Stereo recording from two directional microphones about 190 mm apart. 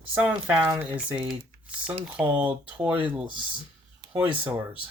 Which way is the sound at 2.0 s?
5° right (ahead or behind).